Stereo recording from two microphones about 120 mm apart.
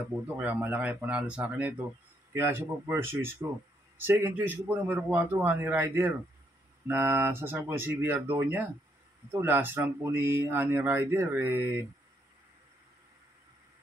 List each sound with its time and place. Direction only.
0.4 s a man's voice: 15° right (ahead or behind)